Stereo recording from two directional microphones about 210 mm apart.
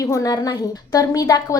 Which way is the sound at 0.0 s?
15° left (ahead or behind).